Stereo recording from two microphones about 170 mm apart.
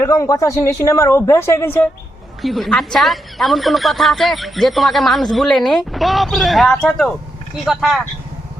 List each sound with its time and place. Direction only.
0.0 s speech: 20° left (ahead or behind)
2.4 s a woman's voice: centre (ahead or behind)